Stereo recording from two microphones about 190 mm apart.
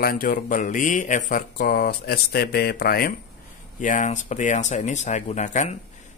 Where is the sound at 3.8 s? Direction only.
40° left (ahead or behind).